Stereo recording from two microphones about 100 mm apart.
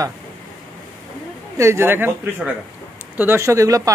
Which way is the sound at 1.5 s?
30° right (ahead or behind).